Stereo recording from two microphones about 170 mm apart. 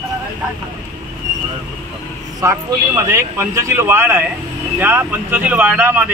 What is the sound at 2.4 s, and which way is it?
Speech, 15° right (ahead or behind).